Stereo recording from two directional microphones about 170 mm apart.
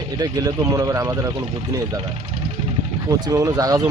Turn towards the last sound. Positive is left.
turn(degrees=-20)  # may be behind; listen again after turning